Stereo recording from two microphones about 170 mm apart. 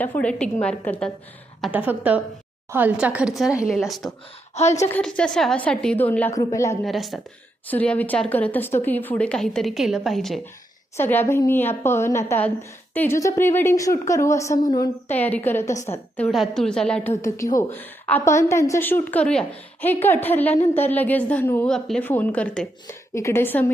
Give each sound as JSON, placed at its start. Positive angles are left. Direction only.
{"t": 0.0, "sound": "a woman's voice", "side_deg": 10}
{"t": 1.7, "sound": "a woman's voice", "side_deg": -10}
{"t": 4.5, "sound": "a woman's voice", "side_deg": 40}
{"t": 4.8, "sound": "a woman's voice", "side_deg": 10}
{"t": 6.8, "sound": "a woman's voice", "side_deg": 0}
{"t": 10.9, "sound": "a woman's voice", "side_deg": 15}
{"t": 15.1, "sound": "a woman's voice", "side_deg": 10}
{"t": 15.7, "sound": "a woman's voice", "side_deg": 45}
{"t": 16.1, "sound": "a woman's voice", "side_deg": 0}